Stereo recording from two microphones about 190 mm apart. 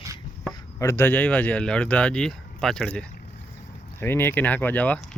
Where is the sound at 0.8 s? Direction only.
15° left (ahead or behind).